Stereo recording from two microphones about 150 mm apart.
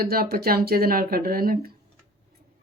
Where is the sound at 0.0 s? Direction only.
90° right.